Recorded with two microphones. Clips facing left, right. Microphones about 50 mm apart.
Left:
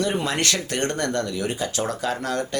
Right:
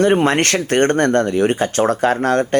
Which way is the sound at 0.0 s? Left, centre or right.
Right.